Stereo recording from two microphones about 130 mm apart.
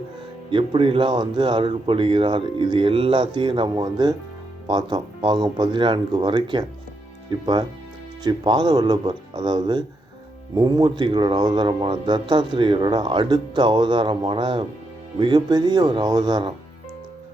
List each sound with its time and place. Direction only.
0.5 s a man's voice: 40° right (ahead or behind)